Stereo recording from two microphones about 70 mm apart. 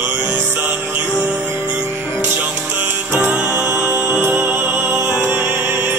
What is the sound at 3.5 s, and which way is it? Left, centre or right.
Music, right.